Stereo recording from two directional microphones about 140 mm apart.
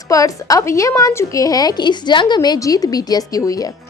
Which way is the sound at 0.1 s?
25° left (ahead or behind).